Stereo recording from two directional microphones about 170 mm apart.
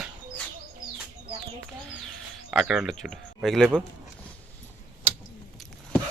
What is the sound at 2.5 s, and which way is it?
Speech, 5° right (ahead or behind).